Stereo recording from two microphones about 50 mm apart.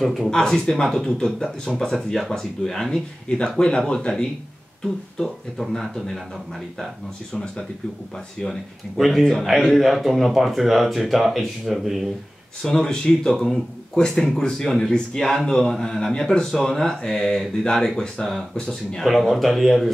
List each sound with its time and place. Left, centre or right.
0.0 s speech: centre
3.3 s speech: centre
5.2 s speech: centre
8.9 s speech: centre
9.2 s speech: centre
9.7 s speech: centre
12.6 s speech: centre